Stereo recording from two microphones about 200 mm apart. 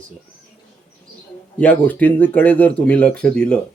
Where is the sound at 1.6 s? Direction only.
10° left (ahead or behind).